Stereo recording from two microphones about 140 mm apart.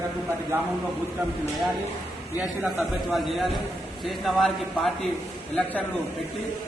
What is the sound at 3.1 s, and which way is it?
A man's voice, centre (ahead or behind).